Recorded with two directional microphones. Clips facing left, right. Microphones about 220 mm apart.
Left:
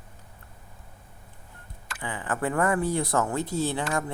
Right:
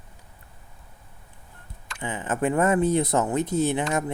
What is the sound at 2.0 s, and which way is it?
Speech, 20° right (ahead or behind).